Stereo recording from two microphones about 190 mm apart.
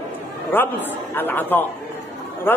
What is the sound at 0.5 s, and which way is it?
A man's voice, 10° left (ahead or behind).